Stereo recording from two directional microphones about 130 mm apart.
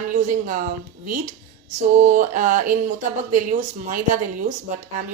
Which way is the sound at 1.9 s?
75° right (ahead or behind).